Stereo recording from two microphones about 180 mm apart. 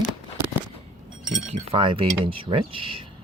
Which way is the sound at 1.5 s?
30° right (ahead or behind).